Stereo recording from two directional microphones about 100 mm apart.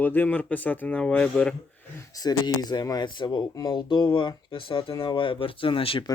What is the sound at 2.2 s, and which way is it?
Speech, 45° left (ahead or behind).